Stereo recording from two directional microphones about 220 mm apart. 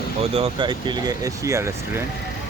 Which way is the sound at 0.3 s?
25° right (ahead or behind).